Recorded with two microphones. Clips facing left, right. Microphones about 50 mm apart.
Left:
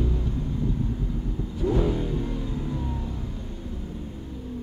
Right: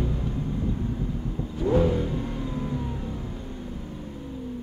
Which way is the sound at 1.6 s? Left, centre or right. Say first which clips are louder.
Right 2 dB; right.